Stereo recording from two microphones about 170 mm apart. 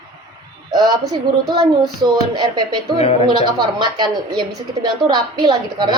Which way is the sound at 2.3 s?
25° right (ahead or behind).